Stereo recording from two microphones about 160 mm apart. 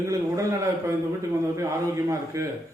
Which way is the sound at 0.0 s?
20° right (ahead or behind).